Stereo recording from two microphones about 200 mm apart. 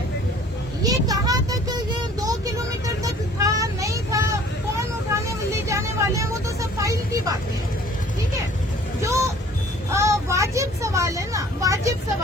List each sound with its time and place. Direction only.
0.8 s vehicle: 20° right (ahead or behind)
5.6 s vehicle: 15° right (ahead or behind)
9.0 s vehicle: 15° right (ahead or behind)